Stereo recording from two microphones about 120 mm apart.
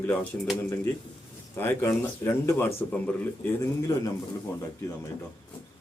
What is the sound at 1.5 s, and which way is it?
Speech, 20° left (ahead or behind).